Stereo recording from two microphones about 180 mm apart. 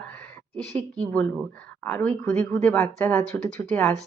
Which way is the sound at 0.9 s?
5° left (ahead or behind).